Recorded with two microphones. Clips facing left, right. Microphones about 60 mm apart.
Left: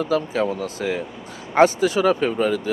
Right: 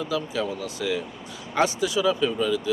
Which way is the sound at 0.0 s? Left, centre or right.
Left.